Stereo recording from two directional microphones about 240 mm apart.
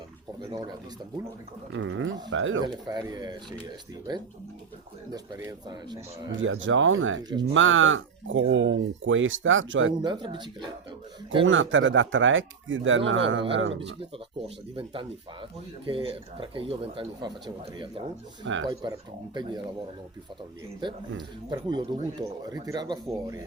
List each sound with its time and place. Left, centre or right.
1.7 s speech: right
2.8 s speech: centre
6.3 s speech: right
7.3 s speech: centre
7.5 s speech: right
10.0 s speech: centre
11.4 s speech: right
14.0 s speech: right
20.8 s speech: centre